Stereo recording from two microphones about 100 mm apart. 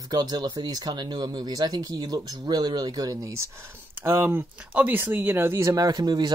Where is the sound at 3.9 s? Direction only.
25° right (ahead or behind).